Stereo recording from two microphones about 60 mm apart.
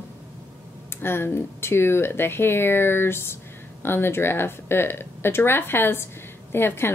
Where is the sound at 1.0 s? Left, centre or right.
Left.